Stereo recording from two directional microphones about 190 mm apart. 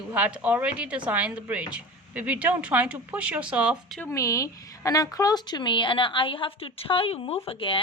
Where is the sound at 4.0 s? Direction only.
15° left (ahead or behind).